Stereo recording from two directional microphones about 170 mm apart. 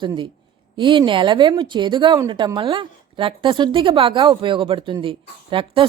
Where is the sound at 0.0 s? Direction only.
30° right (ahead or behind).